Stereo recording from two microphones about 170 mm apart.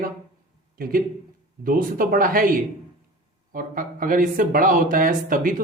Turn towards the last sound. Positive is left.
turn(degrees=-55)  # may be behind; listen again after turning